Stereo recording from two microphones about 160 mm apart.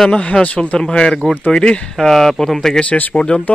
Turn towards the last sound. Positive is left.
turn(degrees=5)  # may be behind; listen again after turning